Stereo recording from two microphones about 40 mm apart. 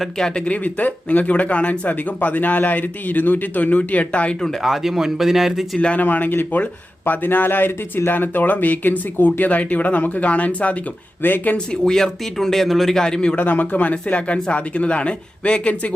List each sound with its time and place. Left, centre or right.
0.3 s speech: left
4.6 s speech: centre
6.0 s speech: left
9.5 s speech: left
11.2 s speech: left
11.9 s speech: centre
13.3 s speech: left
14.1 s speech: left